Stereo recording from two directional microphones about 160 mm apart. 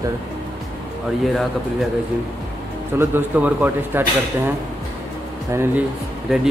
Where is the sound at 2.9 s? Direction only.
10° right (ahead or behind).